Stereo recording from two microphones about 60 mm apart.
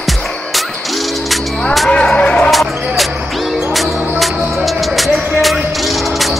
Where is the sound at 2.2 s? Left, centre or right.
Centre.